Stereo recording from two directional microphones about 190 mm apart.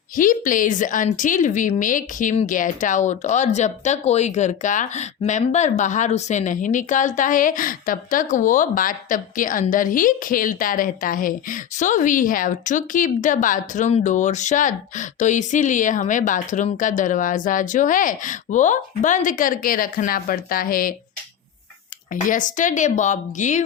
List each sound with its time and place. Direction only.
0.2 s speech: 45° left (ahead or behind)
22.1 s speech: 45° left (ahead or behind)